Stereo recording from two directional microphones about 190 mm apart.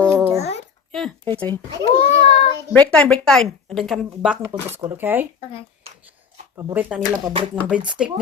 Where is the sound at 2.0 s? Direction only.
30° left (ahead or behind).